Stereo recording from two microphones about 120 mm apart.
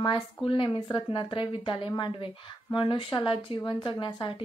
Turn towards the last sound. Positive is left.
turn(degrees=40)  # may be behind; listen again after turning